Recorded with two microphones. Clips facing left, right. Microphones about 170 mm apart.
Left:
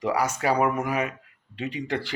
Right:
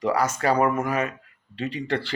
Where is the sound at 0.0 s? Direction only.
15° left (ahead or behind).